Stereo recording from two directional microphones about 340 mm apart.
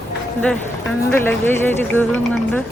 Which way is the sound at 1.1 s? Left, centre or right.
Centre.